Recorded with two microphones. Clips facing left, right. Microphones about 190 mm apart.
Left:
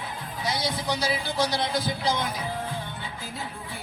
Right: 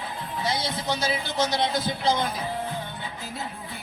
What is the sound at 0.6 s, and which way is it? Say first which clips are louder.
Speech: even; 25° right (ahead or behind).